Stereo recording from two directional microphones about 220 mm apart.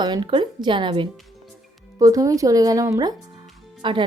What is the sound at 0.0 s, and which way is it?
Speech, 20° right (ahead or behind).